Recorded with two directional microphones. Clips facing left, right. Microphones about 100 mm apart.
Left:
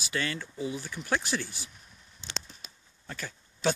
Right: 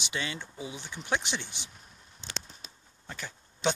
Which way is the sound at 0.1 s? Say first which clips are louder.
Left 3 dB; 20° right (ahead or behind).